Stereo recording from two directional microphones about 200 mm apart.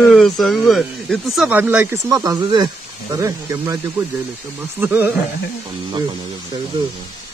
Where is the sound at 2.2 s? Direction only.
20° right (ahead or behind).